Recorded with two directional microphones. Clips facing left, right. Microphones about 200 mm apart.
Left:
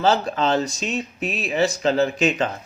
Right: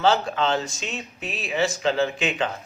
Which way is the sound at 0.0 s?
40° left (ahead or behind).